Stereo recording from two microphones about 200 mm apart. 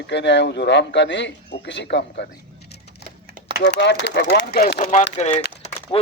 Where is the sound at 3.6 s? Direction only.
60° left (ahead or behind); by 5.1 s 40° left (ahead or behind).